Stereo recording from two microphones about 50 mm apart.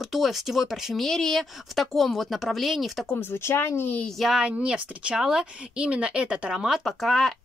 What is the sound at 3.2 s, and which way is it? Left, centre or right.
Speech, left.